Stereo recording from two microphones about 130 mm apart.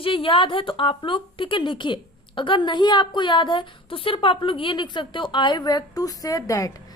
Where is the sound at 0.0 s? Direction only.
40° left (ahead or behind).